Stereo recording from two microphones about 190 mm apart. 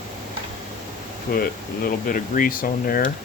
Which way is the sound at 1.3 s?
55° left (ahead or behind).